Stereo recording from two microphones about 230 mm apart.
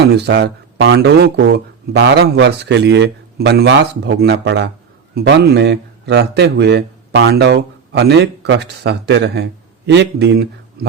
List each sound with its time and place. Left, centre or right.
0.1 s a man's voice: right